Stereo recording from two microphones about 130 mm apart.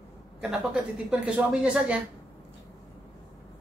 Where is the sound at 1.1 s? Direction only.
10° right (ahead or behind).